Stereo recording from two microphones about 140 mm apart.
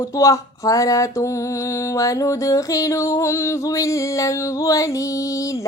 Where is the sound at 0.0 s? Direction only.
25° left (ahead or behind).